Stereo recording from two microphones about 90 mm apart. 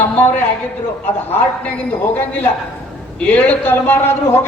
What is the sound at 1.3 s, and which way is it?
A man's voice, 20° left (ahead or behind).